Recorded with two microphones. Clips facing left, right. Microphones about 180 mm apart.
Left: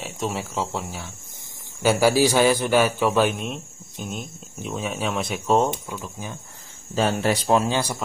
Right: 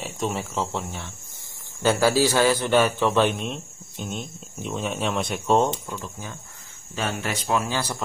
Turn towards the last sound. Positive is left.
turn(degrees=15)  # may be behind; listen again after turning